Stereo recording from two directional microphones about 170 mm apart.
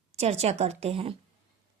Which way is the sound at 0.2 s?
35° right (ahead or behind).